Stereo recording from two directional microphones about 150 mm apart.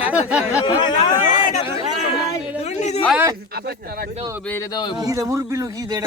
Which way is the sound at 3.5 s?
90° right.